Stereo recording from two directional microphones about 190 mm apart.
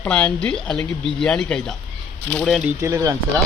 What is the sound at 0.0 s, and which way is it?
A woman's voice, 5° left (ahead or behind).